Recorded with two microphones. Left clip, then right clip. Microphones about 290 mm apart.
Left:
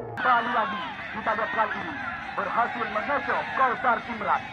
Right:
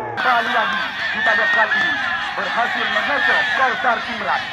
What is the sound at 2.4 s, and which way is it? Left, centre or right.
Speech, right.